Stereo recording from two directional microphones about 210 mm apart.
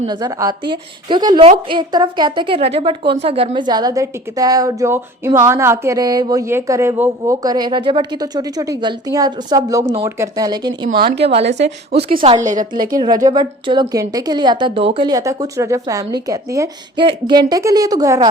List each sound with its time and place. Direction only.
0.1 s a woman's voice: 20° right (ahead or behind)
10.8 s a woman's voice: 45° right (ahead or behind)
12.2 s a woman's voice: 30° right (ahead or behind)
12.9 s a woman's voice: 20° right (ahead or behind)